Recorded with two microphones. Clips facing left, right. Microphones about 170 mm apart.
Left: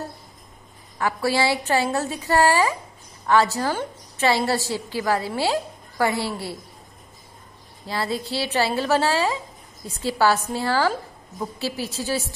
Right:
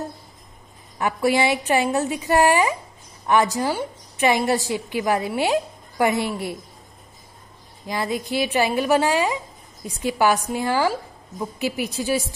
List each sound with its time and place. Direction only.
0.9 s a woman's voice: 20° right (ahead or behind)
7.8 s a woman's voice: 15° right (ahead or behind)